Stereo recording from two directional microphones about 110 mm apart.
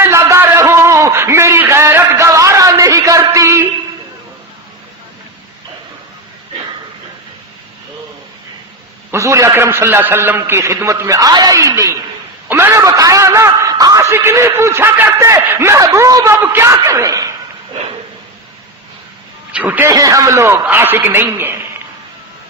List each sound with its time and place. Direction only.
0.0 s a sound: 25° right (ahead or behind)
9.1 s a man's voice: 30° right (ahead or behind)
12.5 s a man's voice: 20° right (ahead or behind)
19.5 s speech: 15° right (ahead or behind)
19.9 s a man's voice: 30° right (ahead or behind)